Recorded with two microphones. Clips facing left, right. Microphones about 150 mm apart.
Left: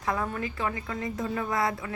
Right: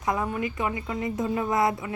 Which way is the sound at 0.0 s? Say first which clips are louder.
Right 3 dB; 20° right (ahead or behind).